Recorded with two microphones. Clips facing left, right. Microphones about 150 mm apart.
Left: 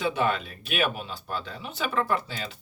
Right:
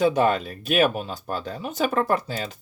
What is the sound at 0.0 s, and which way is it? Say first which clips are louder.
Speech: right 6 dB; 40° right (ahead or behind).